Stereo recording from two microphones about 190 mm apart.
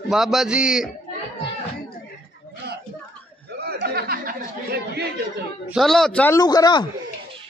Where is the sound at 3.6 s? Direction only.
55° right (ahead or behind).